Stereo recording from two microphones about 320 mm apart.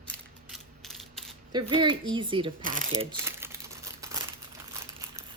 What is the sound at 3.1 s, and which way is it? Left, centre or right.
Crumpling, centre.